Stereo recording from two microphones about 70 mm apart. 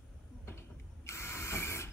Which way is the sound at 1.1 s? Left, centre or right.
Left.